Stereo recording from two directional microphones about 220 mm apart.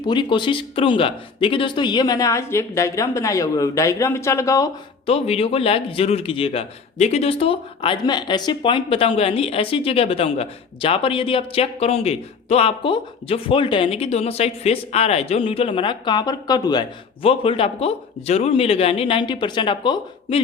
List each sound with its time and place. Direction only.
0.0 s speech: 20° left (ahead or behind)
5.0 s a man's voice: 25° left (ahead or behind)